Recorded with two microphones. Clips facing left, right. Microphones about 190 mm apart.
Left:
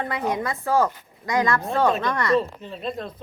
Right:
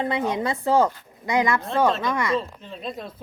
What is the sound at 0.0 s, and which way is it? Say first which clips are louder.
Speech: right 2 dB; 25° right (ahead or behind).